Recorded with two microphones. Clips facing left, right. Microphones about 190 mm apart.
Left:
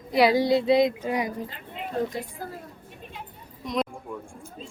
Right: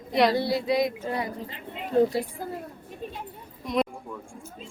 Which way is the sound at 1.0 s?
15° left (ahead or behind).